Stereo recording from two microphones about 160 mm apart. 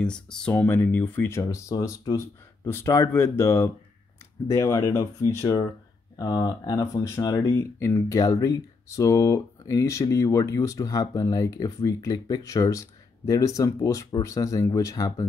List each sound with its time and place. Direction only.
0.0 s speech: 5° left (ahead or behind); by 15.2 s 20° left (ahead or behind)